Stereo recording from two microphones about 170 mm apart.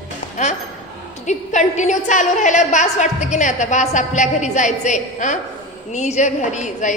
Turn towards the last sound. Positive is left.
turn(degrees=45)  # may be behind; listen again after turning